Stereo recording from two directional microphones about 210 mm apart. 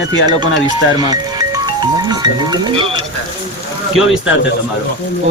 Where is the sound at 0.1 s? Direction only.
20° right (ahead or behind).